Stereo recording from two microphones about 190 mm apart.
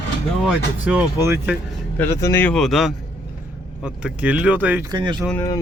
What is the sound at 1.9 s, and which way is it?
Speech, 10° left (ahead or behind).